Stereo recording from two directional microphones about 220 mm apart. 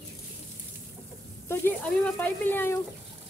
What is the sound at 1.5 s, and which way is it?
Speech, 5° left (ahead or behind).